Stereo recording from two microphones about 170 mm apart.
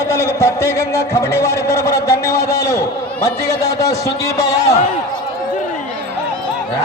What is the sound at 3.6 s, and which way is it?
Speech, 20° left (ahead or behind).